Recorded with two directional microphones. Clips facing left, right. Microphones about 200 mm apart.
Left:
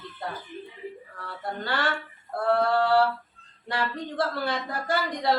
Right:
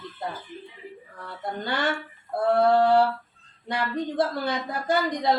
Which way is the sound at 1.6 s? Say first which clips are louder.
Right 1 dB; 20° right (ahead or behind).